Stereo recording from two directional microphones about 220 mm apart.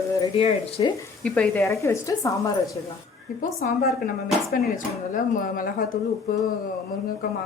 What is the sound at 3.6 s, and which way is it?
Speech, 35° left (ahead or behind).